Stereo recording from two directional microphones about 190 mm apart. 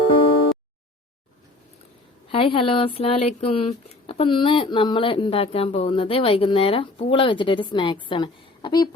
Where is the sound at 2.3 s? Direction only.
30° left (ahead or behind).